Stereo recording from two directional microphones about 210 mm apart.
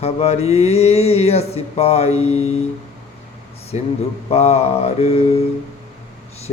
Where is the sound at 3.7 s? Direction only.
30° left (ahead or behind).